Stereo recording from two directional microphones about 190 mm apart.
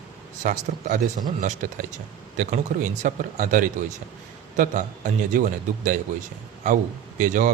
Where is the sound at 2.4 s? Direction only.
40° right (ahead or behind).